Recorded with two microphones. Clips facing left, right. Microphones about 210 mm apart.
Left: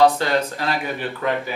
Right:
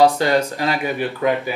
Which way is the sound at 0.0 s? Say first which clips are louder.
Right 2 dB; 10° right (ahead or behind).